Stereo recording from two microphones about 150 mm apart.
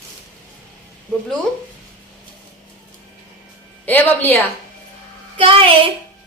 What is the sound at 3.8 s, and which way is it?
Speech, 10° left (ahead or behind).